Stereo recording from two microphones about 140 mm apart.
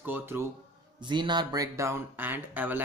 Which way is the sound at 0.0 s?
15° right (ahead or behind).